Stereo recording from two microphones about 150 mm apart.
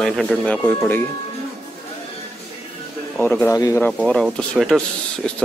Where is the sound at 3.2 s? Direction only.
10° left (ahead or behind).